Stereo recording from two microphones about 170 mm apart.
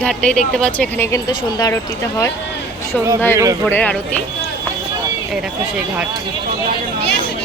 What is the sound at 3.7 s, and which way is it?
Speech, 10° left (ahead or behind).